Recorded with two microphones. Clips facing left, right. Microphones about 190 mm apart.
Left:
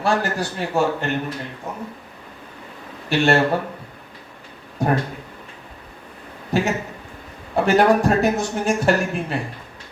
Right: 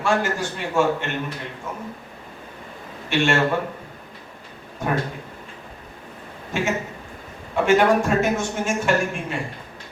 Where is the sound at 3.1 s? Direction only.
35° left (ahead or behind).